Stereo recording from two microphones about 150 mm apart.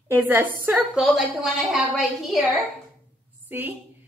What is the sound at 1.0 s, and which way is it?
A woman's voice, centre (ahead or behind).